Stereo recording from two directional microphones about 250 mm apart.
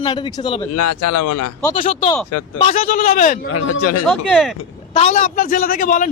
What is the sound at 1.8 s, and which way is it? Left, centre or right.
A man's voice, left.